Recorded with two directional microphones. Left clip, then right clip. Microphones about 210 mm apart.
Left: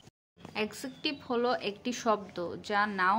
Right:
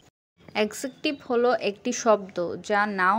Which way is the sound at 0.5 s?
35° right (ahead or behind).